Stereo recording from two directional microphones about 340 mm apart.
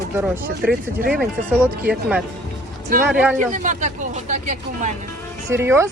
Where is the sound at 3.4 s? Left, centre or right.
Right.